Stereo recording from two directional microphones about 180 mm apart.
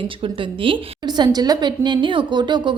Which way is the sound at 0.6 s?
25° right (ahead or behind).